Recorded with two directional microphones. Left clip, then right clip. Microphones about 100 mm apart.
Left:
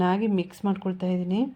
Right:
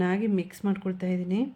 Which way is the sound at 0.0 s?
20° left (ahead or behind).